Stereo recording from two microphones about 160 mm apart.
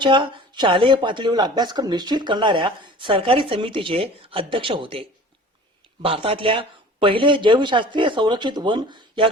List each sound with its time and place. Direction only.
0.0 s speech: 30° right (ahead or behind)